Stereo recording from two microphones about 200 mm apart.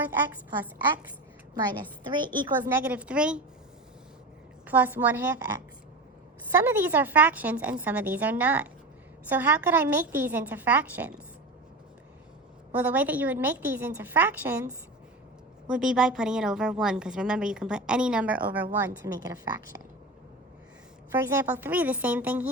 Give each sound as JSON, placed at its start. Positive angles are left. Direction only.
{"t": 0.0, "sound": "a woman's voice", "side_deg": -10}
{"t": 1.8, "sound": "a woman's voice", "side_deg": -25}
{"t": 2.6, "sound": "a woman's voice", "side_deg": -10}
{"t": 4.6, "sound": "a woman's voice", "side_deg": -10}
{"t": 6.6, "sound": "a woman's voice", "side_deg": -10}
{"t": 12.7, "sound": "a woman's voice", "side_deg": -10}
{"t": 21.1, "sound": "a woman's voice", "side_deg": -10}